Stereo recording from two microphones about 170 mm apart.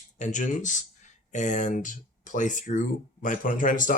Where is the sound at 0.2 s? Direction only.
45° left (ahead or behind).